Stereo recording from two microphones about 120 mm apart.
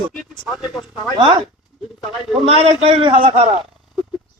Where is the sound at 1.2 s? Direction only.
45° right (ahead or behind).